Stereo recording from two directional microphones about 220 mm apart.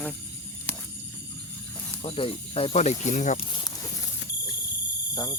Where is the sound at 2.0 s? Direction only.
25° left (ahead or behind).